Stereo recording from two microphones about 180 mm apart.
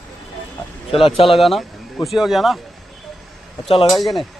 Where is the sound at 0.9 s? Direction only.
30° left (ahead or behind).